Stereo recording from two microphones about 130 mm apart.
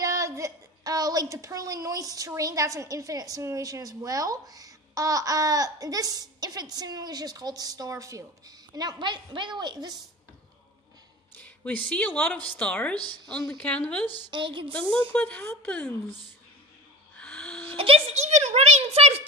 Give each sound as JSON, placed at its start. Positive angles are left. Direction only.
{"t": 0.0, "sound": "a woman's voice", "side_deg": -25}
{"t": 11.3, "sound": "a sound", "side_deg": 10}
{"t": 11.9, "sound": "speech", "side_deg": 10}
{"t": 12.9, "sound": "a woman's voice", "side_deg": -35}
{"t": 13.6, "sound": "speech", "side_deg": 10}
{"t": 14.3, "sound": "a woman's voice", "side_deg": -40}
{"t": 14.7, "sound": "speech", "side_deg": 10}
{"t": 17.2, "sound": "a sound", "side_deg": 10}
{"t": 17.6, "sound": "a sound", "side_deg": -45}